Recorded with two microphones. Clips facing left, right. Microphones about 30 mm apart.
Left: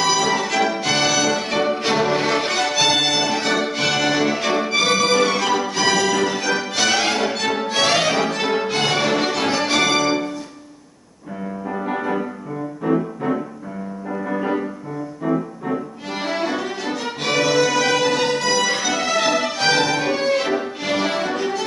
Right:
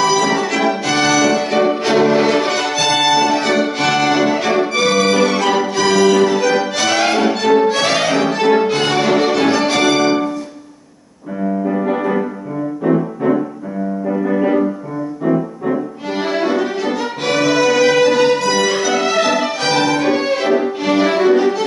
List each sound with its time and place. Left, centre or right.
0.0 s music: centre
6.8 s violin: centre
11.8 s music: centre
15.2 s violin: centre
18.5 s music: centre